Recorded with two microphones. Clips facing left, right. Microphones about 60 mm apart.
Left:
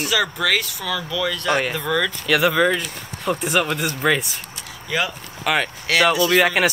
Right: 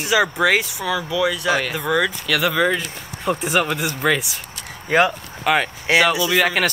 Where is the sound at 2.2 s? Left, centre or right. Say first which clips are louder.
Left 2 dB; centre.